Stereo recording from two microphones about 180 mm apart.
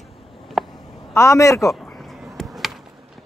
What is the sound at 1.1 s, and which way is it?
Speech, 15° left (ahead or behind).